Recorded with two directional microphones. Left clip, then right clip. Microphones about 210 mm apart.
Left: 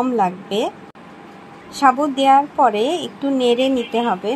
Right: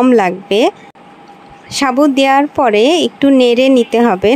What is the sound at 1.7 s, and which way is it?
Speech, 30° right (ahead or behind).